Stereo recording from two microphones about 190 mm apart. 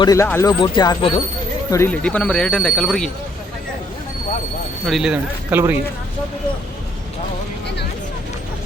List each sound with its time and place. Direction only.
0.0 s speech: 15° left (ahead or behind)
1.7 s speech: 10° left (ahead or behind)
4.9 s speech: centre (ahead or behind)